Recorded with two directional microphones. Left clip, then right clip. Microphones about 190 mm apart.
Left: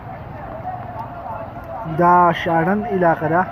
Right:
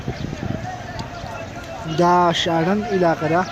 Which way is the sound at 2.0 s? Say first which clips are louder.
Left 2 dB; 30° right (ahead or behind).